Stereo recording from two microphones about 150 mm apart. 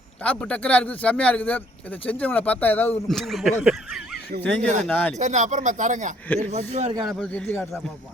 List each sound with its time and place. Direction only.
0.2 s a man's voice: 5° left (ahead or behind)
3.1 s speech: centre (ahead or behind)
4.9 s a man's voice: 10° left (ahead or behind)
5.1 s speech: 50° right (ahead or behind)
6.2 s a man's voice: 10° left (ahead or behind)
6.5 s speech: 45° right (ahead or behind)
7.0 s a man's voice: 5° left (ahead or behind)